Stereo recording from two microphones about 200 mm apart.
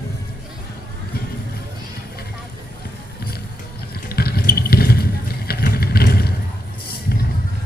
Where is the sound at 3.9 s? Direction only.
50° left (ahead or behind).